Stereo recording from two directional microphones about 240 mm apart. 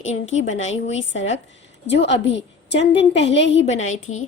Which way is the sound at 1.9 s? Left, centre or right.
Left.